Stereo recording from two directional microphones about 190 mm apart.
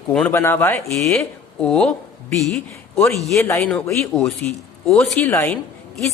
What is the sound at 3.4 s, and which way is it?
A man's voice, 15° left (ahead or behind).